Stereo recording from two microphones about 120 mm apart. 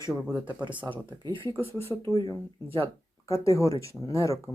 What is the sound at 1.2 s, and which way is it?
Speech, 45° right (ahead or behind).